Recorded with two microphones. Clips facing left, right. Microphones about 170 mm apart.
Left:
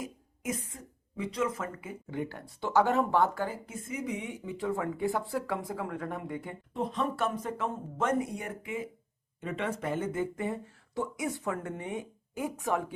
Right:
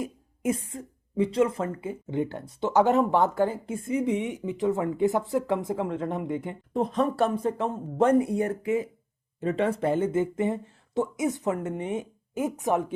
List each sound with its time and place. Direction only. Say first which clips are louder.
0.0 s speech: right 8 dB; 30° right (ahead or behind)
6.7 s speech: right 7 dB; 40° right (ahead or behind); by 12.8 s 20° right (ahead or behind)